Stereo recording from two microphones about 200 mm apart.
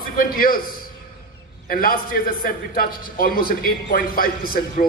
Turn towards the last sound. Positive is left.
turn(degrees=45)  # may be behind; listen again after turning